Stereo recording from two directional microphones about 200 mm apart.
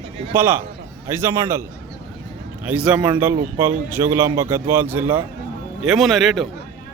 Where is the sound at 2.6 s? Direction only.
5° right (ahead or behind).